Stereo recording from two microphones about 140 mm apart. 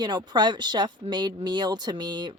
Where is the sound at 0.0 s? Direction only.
30° right (ahead or behind).